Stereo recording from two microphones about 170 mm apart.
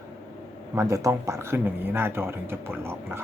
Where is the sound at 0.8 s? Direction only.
20° right (ahead or behind).